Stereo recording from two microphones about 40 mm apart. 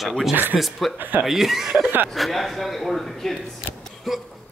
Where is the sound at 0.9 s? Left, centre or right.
Right.